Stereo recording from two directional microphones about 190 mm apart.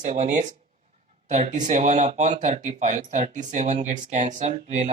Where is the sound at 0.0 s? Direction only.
40° right (ahead or behind).